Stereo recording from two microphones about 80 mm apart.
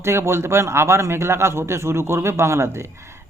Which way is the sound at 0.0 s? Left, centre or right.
Right.